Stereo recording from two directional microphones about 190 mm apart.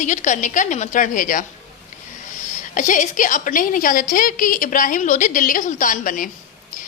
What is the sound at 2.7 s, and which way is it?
A woman's voice, 40° left (ahead or behind).